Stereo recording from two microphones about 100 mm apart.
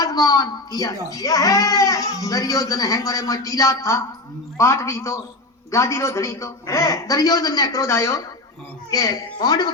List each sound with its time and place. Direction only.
0.0 s a woman's voice: 35° left (ahead or behind)